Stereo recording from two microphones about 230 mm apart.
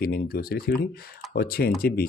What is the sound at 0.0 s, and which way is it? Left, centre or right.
Speech, left.